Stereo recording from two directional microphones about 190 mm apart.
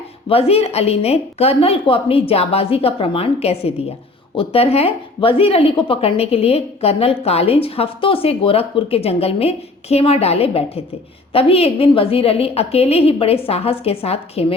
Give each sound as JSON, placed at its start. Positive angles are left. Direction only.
{"t": 0.3, "sound": "speech", "side_deg": 30}